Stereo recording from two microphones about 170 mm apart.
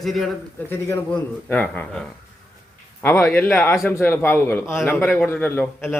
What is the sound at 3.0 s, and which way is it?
A man's voice, 15° left (ahead or behind).